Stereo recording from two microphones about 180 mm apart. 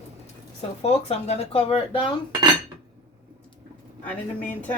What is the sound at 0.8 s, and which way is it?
Speech, 35° left (ahead or behind).